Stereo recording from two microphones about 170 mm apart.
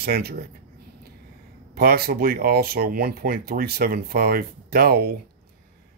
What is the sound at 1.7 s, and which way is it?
Speech, 65° right (ahead or behind).